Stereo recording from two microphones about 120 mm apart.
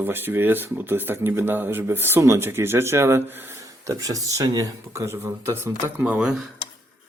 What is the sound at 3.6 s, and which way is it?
Speech, 30° right (ahead or behind).